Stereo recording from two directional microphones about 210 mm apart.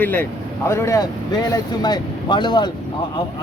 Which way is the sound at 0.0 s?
10° left (ahead or behind).